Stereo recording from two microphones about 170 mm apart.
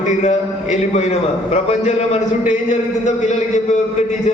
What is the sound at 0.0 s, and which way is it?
A man's voice, 45° left (ahead or behind).